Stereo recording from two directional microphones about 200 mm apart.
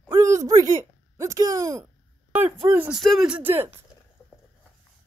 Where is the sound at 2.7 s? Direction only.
5° right (ahead or behind).